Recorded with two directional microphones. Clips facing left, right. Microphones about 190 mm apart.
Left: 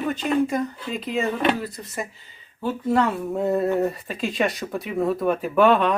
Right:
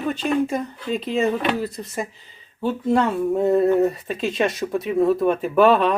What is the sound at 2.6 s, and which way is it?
Speech, 25° right (ahead or behind).